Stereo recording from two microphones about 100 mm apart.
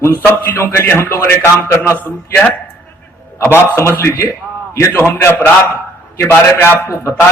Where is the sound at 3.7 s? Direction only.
25° left (ahead or behind).